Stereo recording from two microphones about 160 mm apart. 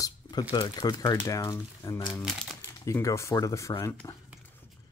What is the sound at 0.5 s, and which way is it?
Speech, 25° left (ahead or behind).